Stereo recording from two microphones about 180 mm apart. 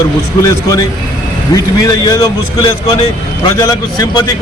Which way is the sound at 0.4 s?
20° left (ahead or behind).